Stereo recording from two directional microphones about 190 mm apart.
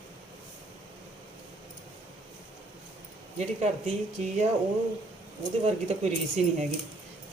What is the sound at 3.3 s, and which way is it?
Speech, 35° right (ahead or behind).